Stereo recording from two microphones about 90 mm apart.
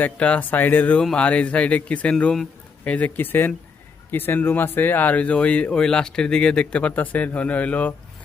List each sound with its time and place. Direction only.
0.0 s speech: 15° left (ahead or behind)